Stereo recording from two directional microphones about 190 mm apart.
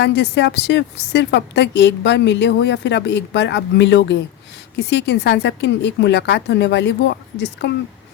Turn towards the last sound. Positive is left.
turn(degrees=65)  # may be behind; listen again after turning